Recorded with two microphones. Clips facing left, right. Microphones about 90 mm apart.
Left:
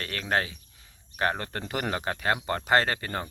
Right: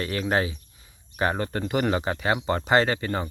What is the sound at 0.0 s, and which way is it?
Speech, 10° right (ahead or behind).